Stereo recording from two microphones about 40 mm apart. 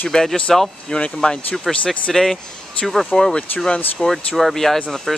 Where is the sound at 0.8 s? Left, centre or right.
Left.